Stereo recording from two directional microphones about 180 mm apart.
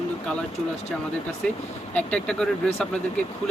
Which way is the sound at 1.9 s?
5° left (ahead or behind).